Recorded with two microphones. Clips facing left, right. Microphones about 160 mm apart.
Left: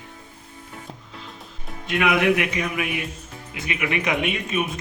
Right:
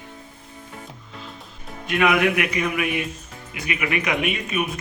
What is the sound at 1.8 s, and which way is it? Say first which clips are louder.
Speech: even; 25° left (ahead or behind).